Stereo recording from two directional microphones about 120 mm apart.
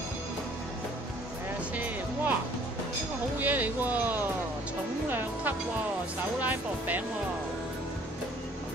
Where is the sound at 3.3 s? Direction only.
15° right (ahead or behind).